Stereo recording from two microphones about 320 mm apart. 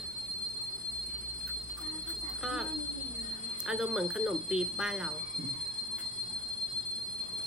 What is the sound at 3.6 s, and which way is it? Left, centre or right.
Speech, centre.